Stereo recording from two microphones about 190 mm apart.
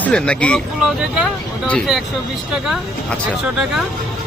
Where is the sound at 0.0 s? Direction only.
5° left (ahead or behind).